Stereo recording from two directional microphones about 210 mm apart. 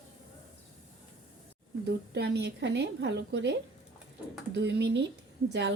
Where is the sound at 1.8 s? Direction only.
50° right (ahead or behind).